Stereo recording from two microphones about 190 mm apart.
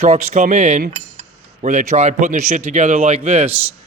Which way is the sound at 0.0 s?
35° right (ahead or behind).